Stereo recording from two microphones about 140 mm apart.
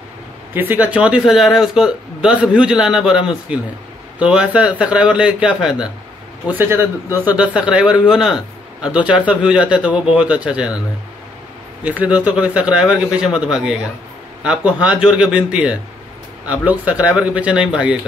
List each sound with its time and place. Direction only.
0.6 s a man's voice: 10° right (ahead or behind)
11.8 s a man's voice: 10° right (ahead or behind)